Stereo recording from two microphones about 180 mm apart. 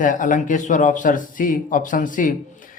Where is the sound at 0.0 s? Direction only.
45° left (ahead or behind).